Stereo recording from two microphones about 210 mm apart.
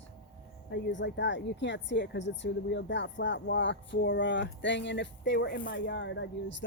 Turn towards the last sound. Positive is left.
turn(degrees=60)  # may be behind; listen again after turning